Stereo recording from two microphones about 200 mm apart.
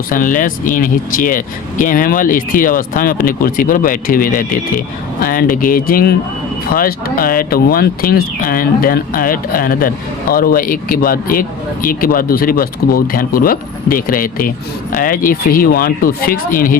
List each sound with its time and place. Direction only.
0.1 s speech: 45° left (ahead or behind)